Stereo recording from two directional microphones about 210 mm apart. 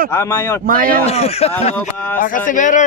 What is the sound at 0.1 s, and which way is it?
Speech, 10° left (ahead or behind).